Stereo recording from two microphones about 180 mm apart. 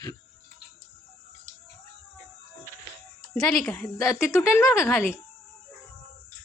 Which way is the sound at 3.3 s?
5° left (ahead or behind).